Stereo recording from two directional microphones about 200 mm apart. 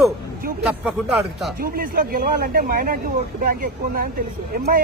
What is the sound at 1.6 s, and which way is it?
Speech, 45° right (ahead or behind).